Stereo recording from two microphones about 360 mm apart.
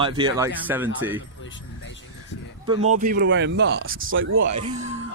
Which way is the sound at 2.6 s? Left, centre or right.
Centre.